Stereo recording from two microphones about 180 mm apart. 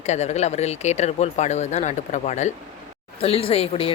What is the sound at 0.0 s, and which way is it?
Speech, 40° left (ahead or behind).